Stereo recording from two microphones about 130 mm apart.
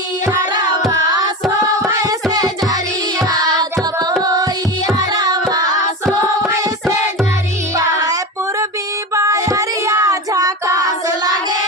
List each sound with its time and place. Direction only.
0.9 s music: 20° right (ahead or behind)
7.8 s female singing: 25° right (ahead or behind)
9.1 s child singing: 25° right (ahead or behind)